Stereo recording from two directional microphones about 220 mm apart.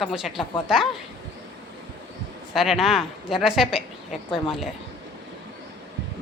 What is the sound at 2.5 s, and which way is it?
Speech, centre (ahead or behind).